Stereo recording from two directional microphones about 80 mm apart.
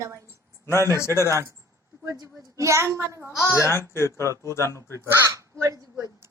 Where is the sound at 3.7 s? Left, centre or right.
Left.